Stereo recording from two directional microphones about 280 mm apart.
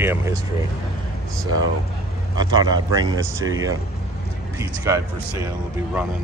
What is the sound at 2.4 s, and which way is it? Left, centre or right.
Speech, centre.